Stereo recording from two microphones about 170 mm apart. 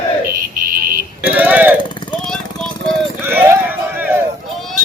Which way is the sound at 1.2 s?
10° right (ahead or behind).